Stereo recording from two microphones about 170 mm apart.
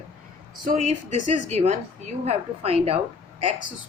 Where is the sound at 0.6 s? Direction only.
50° right (ahead or behind).